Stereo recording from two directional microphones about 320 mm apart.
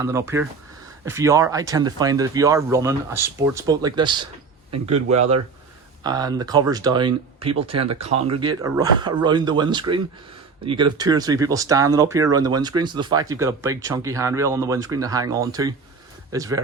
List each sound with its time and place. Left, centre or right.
0.0 s speech: centre